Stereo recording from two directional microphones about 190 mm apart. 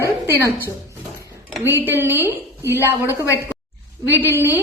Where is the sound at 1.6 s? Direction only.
10° right (ahead or behind).